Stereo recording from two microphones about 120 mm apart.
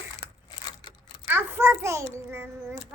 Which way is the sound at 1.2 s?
15° right (ahead or behind).